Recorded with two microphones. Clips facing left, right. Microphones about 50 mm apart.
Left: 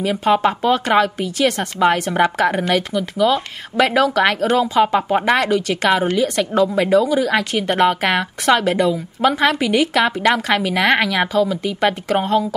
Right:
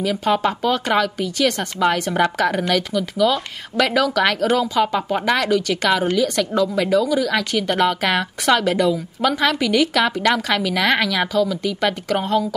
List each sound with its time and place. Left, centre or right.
0.0 s speech: left